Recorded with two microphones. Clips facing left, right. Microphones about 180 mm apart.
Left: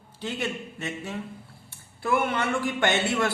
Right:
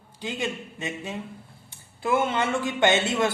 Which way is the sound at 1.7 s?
20° right (ahead or behind).